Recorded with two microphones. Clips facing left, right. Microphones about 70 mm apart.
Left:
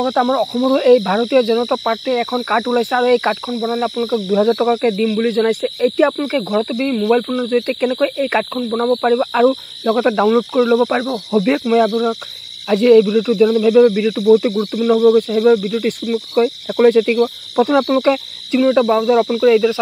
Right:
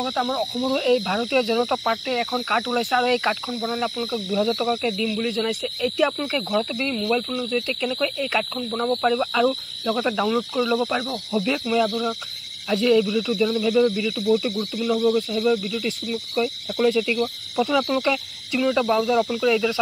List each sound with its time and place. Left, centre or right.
0.0 s speech: left
1.2 s speech: left
4.1 s speech: left
6.1 s speech: left
7.2 s speech: left
8.6 s speech: left
10.2 s speech: left
10.8 s speech: left
12.6 s speech: left
14.5 s speech: left
16.1 s speech: left
16.6 s speech: left